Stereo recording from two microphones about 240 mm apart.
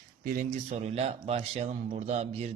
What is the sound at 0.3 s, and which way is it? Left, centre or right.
Speech, right.